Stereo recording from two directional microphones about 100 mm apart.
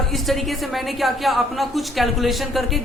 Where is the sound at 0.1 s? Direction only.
Centre (ahead or behind).